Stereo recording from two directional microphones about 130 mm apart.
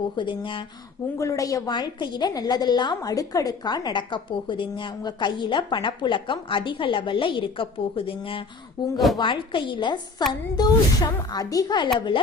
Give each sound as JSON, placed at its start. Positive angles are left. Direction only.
{"t": 0.2, "sound": "a woman's voice", "side_deg": 40}
{"t": 1.2, "sound": "a woman's voice", "side_deg": 25}
{"t": 8.8, "sound": "a woman's voice", "side_deg": 30}